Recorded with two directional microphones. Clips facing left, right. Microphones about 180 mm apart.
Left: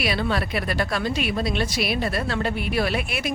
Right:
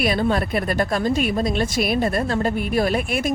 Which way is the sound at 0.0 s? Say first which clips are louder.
Right 4 dB; 45° right (ahead or behind).